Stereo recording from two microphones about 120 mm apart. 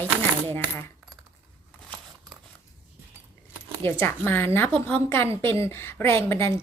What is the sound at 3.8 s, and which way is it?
A woman's voice, 20° left (ahead or behind).